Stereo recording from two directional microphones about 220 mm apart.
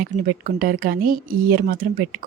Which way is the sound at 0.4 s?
40° right (ahead or behind).